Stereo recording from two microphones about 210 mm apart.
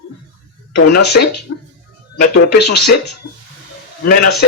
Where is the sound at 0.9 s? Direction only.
50° left (ahead or behind).